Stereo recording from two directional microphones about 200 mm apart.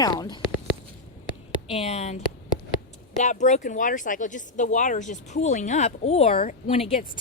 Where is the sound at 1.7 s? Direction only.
30° left (ahead or behind).